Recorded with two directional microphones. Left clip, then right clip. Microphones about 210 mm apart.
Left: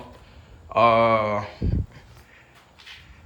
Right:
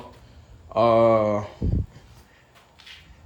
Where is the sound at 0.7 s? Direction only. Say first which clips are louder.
Even; 25° right (ahead or behind).